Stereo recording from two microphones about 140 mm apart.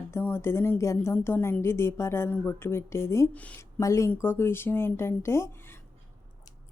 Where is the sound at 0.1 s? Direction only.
15° left (ahead or behind).